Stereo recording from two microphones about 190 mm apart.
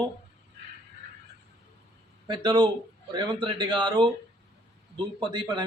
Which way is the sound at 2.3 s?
25° right (ahead or behind).